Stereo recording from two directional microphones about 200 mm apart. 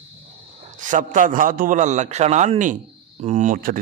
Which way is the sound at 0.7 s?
40° right (ahead or behind).